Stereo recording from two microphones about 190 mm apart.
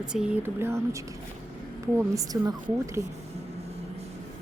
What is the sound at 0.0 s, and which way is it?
A woman's voice, 5° right (ahead or behind).